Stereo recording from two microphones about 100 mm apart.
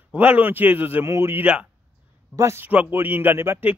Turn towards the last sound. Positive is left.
turn(degrees=-20)  # may be behind; listen again after turning